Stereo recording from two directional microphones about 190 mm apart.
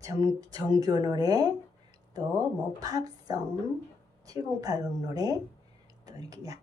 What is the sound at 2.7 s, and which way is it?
A woman's voice, 20° right (ahead or behind).